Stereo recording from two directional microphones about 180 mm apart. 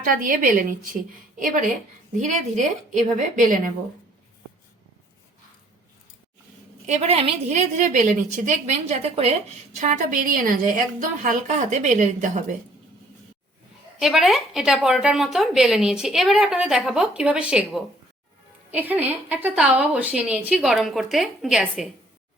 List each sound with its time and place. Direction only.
0.0 s a woman's voice: 50° right (ahead or behind)
6.8 s a woman's voice: 40° right (ahead or behind)
14.0 s a woman's voice: centre (ahead or behind)